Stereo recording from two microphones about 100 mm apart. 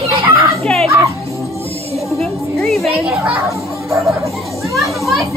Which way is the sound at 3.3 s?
30° right (ahead or behind).